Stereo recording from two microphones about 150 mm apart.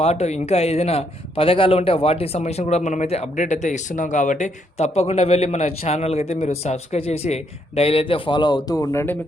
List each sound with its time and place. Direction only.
0.0 s a man's voice: 45° left (ahead or behind); by 9.1 s 20° left (ahead or behind)